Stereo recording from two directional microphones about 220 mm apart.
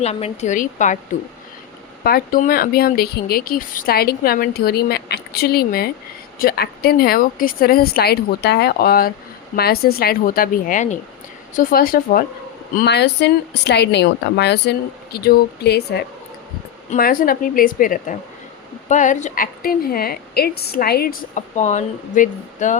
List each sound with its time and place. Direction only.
0.0 s a woman's voice: 30° left (ahead or behind)
2.0 s a woman's voice: 40° left (ahead or behind)